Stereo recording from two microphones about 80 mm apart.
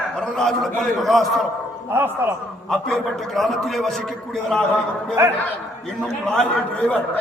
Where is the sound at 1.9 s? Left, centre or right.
Right.